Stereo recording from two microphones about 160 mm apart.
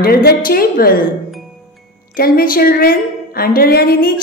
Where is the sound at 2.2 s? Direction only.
70° left (ahead or behind).